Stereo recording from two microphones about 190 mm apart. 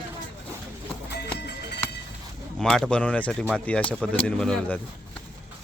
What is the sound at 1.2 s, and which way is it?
Music, 65° left (ahead or behind).